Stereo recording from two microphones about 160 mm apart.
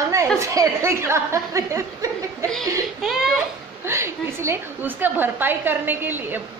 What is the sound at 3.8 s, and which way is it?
A woman's voice, 15° right (ahead or behind).